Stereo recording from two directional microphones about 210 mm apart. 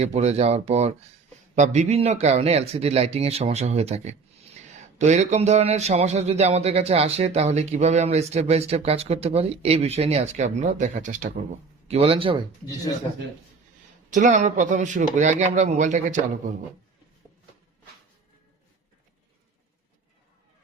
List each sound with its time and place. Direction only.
0.0 s a man's voice: 30° right (ahead or behind)
14.1 s a man's voice: 35° right (ahead or behind)